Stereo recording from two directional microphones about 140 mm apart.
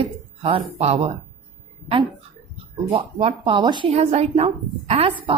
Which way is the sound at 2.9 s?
40° right (ahead or behind).